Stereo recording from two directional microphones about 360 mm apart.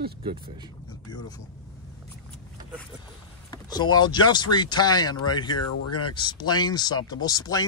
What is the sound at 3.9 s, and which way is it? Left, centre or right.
Speech, centre.